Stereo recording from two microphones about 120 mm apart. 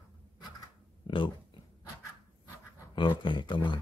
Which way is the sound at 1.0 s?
45° left (ahead or behind).